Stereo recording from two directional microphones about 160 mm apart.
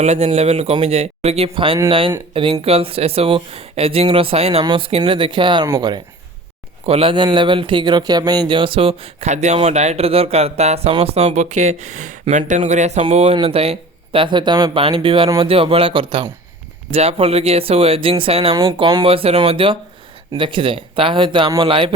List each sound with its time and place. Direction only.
0.0 s speech: 45° right (ahead or behind)
5.6 s speech: 15° right (ahead or behind)
6.8 s speech: 35° right (ahead or behind)
18.5 s speech: 25° right (ahead or behind)